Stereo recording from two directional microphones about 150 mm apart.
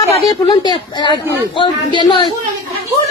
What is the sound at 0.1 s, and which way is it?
A woman's voice, 35° left (ahead or behind).